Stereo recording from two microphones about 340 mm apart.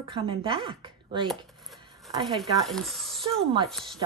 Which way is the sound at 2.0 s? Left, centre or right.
Centre.